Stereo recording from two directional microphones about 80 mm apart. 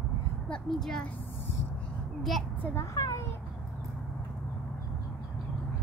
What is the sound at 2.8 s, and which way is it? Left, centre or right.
Speech, left.